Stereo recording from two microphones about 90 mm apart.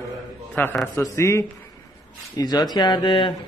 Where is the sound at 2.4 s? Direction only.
50° left (ahead or behind).